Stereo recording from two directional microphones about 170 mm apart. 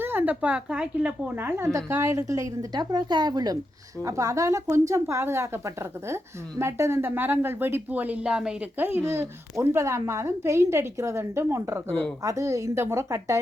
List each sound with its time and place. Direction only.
0.0 s a woman's voice: 10° right (ahead or behind)
11.9 s speech: 5° left (ahead or behind)
12.2 s a woman's voice: 20° right (ahead or behind)